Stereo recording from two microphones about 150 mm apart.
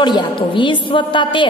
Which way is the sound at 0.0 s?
30° left (ahead or behind).